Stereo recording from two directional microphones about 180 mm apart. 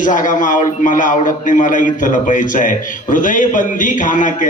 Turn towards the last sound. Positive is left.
turn(degrees=45)  # may be behind; listen again after turning